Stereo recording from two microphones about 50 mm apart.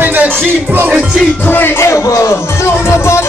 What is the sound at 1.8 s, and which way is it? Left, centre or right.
Speech, left.